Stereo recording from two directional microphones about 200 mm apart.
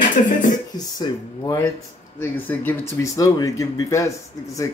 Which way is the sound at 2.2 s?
10° left (ahead or behind).